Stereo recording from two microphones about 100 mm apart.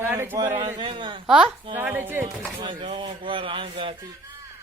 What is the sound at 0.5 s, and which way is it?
Speech, 65° right (ahead or behind).